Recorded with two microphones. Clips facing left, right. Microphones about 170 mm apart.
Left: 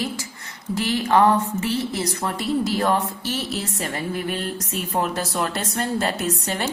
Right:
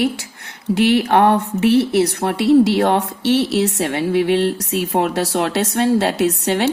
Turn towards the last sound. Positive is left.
turn(degrees=-70)  # may be behind; listen again after turning